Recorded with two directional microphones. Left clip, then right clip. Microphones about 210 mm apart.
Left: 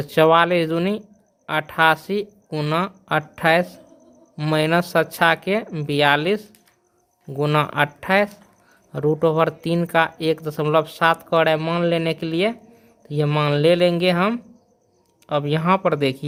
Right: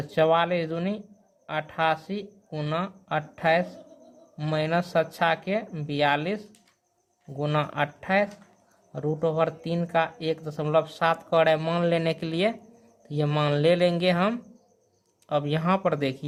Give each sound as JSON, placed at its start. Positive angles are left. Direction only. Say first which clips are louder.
{"t": 0.0, "sound": "speech", "louder": "left 7 dB", "side_deg": 30}